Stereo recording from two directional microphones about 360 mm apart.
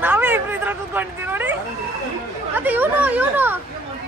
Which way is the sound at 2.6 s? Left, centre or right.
Centre.